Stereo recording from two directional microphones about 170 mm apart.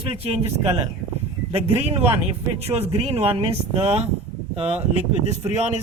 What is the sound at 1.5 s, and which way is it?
Speech, 30° right (ahead or behind).